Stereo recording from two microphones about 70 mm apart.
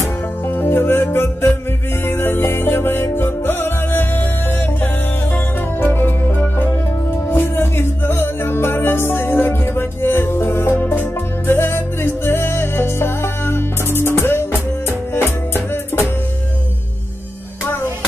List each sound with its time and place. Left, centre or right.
0.5 s music: left